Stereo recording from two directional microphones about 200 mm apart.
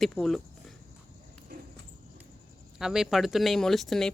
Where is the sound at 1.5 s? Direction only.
45° right (ahead or behind).